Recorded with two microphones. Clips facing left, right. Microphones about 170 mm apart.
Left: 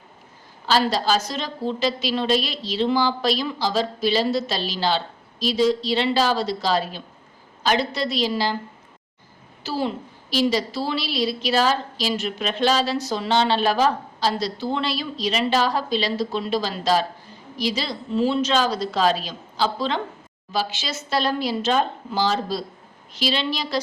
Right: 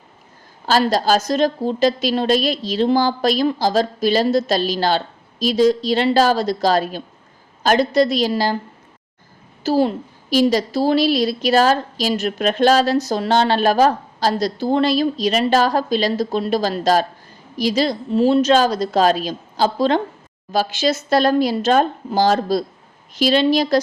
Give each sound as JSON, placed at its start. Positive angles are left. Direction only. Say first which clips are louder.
{"t": 0.6, "sound": "a woman's voice", "louder": "right 4 dB", "side_deg": -45}
{"t": 9.6, "sound": "a woman's voice", "louder": "right 8 dB", "side_deg": -45}